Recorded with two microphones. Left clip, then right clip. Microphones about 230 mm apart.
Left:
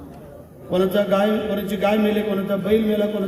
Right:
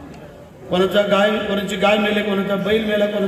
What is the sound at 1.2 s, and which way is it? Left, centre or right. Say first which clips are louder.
A man's voice: right 3 dB; left.